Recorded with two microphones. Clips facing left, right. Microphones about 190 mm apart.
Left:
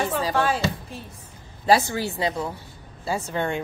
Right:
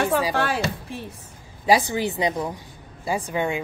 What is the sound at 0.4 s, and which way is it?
Speech, 65° right (ahead or behind).